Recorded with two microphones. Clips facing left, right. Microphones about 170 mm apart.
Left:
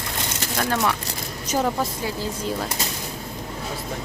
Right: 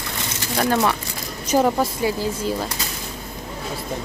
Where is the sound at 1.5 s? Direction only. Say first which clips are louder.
Right 5 dB; 10° right (ahead or behind).